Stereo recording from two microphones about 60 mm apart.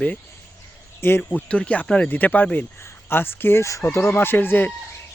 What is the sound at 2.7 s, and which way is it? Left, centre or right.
Speech, left.